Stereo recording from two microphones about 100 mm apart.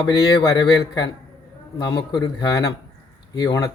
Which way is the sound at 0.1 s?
40° left (ahead or behind).